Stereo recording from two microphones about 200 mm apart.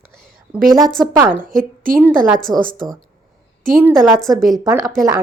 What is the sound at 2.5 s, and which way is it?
Speech, 45° right (ahead or behind).